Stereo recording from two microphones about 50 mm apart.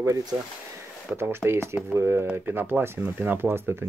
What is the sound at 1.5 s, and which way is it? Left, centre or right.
Speech, right.